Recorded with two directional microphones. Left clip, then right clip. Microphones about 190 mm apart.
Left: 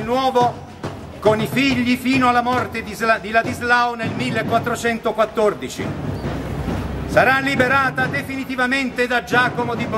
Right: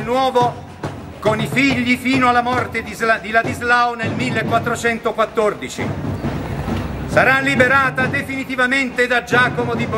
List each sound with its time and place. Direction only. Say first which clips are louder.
0.1 s a man's voice: right 1 dB; centre (ahead or behind)
7.2 s a man's voice: right 2 dB; centre (ahead or behind)